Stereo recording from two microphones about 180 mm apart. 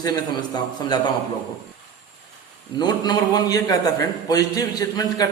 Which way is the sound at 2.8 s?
25° left (ahead or behind).